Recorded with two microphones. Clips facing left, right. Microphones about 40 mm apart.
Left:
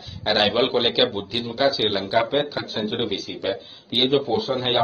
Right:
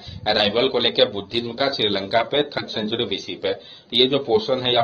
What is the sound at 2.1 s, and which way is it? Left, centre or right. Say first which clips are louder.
Speech: right 1 dB; right.